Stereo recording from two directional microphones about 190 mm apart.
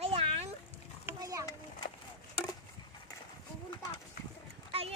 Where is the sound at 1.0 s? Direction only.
15° right (ahead or behind).